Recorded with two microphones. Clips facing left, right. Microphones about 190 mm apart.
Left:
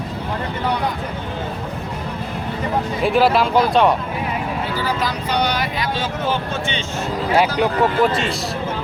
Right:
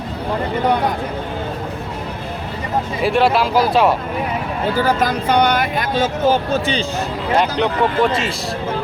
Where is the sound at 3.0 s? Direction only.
Centre (ahead or behind).